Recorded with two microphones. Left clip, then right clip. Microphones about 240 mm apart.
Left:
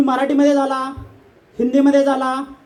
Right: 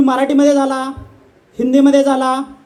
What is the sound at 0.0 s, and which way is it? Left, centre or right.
A man's voice, right.